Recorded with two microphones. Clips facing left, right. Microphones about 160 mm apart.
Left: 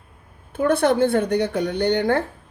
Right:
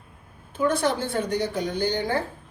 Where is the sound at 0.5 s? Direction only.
60° left (ahead or behind).